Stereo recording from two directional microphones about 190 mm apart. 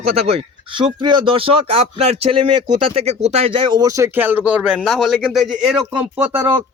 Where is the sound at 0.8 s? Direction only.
25° right (ahead or behind).